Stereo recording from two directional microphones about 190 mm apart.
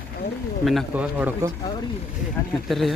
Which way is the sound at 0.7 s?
5° right (ahead or behind).